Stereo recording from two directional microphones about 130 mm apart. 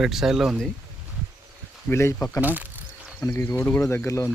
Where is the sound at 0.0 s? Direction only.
Centre (ahead or behind).